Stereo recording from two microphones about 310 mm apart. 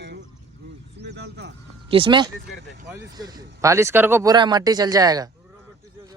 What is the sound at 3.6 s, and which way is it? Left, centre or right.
Speech, centre.